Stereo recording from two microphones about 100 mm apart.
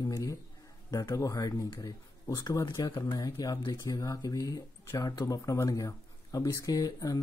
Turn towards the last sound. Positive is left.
turn(degrees=35)  # may be behind; listen again after turning